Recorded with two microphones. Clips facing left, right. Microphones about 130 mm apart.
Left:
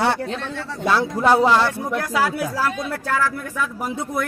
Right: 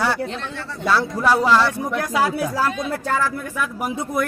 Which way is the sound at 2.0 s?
20° right (ahead or behind).